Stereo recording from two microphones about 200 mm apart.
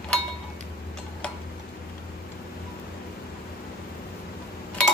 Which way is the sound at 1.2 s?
5° left (ahead or behind).